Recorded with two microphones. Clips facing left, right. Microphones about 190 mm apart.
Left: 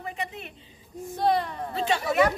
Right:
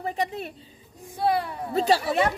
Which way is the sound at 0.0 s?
35° right (ahead or behind).